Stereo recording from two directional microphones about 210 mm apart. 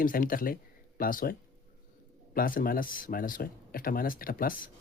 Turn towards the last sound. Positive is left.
turn(degrees=40)  # may be behind; listen again after turning